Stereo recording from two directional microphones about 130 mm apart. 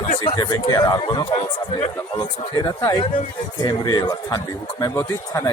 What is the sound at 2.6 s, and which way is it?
A man's voice, 30° left (ahead or behind).